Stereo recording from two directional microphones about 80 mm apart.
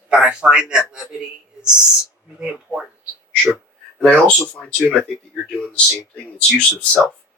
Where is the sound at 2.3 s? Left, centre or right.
Centre.